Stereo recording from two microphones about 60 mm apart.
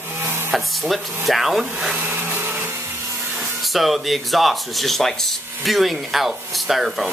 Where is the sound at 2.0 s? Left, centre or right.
Right.